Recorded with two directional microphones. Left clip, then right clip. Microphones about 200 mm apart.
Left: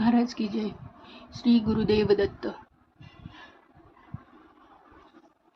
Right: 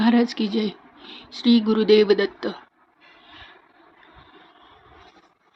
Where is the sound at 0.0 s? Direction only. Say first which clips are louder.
Right 5 dB; 20° right (ahead or behind).